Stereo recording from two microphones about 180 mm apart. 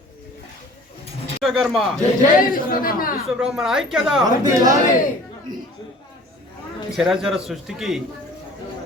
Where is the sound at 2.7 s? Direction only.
55° left (ahead or behind).